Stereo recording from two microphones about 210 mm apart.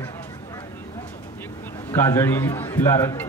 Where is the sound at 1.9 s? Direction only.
10° left (ahead or behind).